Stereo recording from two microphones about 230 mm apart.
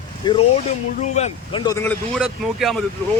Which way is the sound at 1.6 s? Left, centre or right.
Centre.